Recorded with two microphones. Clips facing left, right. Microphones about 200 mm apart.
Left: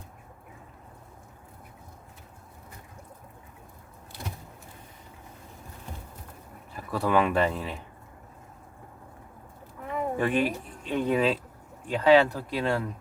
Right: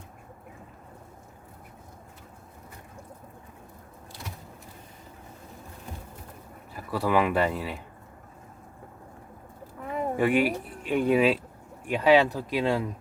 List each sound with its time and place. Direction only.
6.9 s speech: 5° right (ahead or behind)
10.2 s speech: 10° right (ahead or behind)